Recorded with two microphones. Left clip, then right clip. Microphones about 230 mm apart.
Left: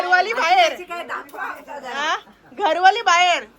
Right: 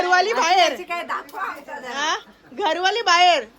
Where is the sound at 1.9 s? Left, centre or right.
Centre.